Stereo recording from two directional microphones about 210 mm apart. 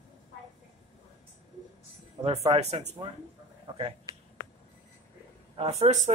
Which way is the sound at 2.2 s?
30° right (ahead or behind).